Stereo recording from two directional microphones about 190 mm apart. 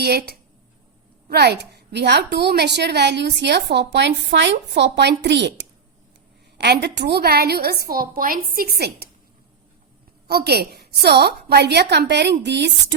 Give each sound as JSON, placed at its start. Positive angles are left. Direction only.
{"t": 0.0, "sound": "a woman's voice", "side_deg": -55}
{"t": 10.2, "sound": "a woman's voice", "side_deg": -55}